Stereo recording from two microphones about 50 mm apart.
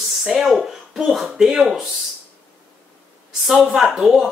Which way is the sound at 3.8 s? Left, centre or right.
Right.